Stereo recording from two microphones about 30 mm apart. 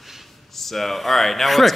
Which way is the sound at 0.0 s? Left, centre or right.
Centre.